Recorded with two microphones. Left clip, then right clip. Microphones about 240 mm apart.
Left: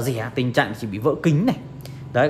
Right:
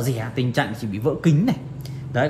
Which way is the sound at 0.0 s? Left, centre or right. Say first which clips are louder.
Left 2 dB; left.